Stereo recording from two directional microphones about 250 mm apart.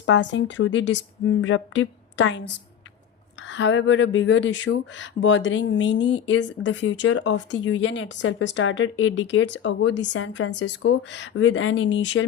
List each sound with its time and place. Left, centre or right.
0.0 s speech: left